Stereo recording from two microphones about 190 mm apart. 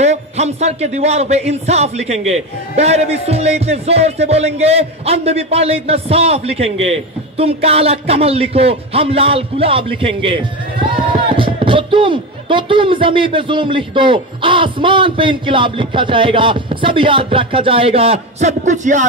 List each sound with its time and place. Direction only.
0.0 s speech: 35° right (ahead or behind)